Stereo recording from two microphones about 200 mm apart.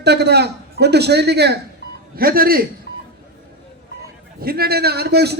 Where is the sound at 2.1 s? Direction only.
50° right (ahead or behind).